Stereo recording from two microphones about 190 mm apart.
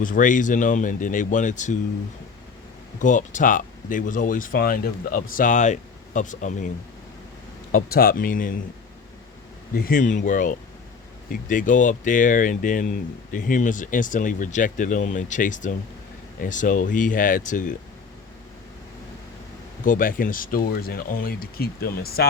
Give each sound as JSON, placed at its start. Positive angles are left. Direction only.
{"t": 0.0, "sound": "speech", "side_deg": 45}
{"t": 3.0, "sound": "speech", "side_deg": 45}
{"t": 7.7, "sound": "speech", "side_deg": 50}
{"t": 9.7, "sound": "speech", "side_deg": 50}
{"t": 19.8, "sound": "speech", "side_deg": 45}